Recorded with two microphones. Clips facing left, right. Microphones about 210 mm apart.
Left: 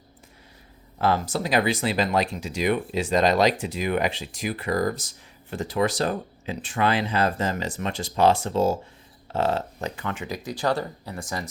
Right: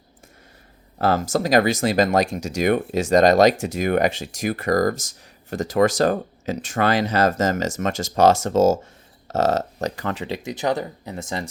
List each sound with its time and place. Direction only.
0.9 s speech: 45° right (ahead or behind); by 11.4 s 25° right (ahead or behind)